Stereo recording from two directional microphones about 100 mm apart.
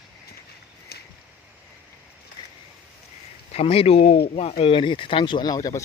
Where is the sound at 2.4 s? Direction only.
45° left (ahead or behind).